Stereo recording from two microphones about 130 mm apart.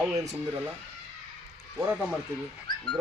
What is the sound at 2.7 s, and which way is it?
Dog, 35° left (ahead or behind).